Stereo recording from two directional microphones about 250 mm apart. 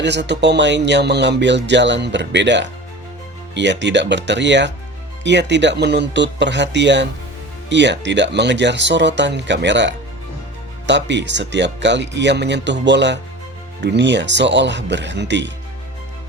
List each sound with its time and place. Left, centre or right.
0.0 s speech: right